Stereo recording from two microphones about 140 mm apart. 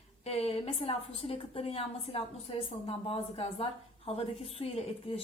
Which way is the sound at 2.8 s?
45° left (ahead or behind).